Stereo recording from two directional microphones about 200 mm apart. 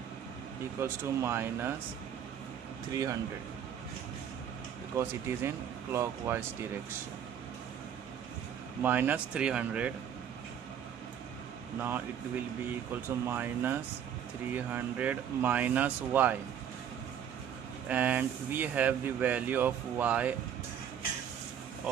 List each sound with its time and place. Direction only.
0.7 s speech: 10° right (ahead or behind)
2.9 s speech: 15° right (ahead or behind)
4.9 s speech: 10° right (ahead or behind)
8.8 s speech: 10° right (ahead or behind)
13.2 s speech: 10° right (ahead or behind)
17.8 s speech: 10° right (ahead or behind)